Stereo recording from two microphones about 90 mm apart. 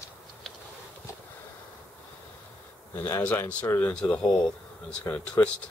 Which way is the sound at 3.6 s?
30° left (ahead or behind).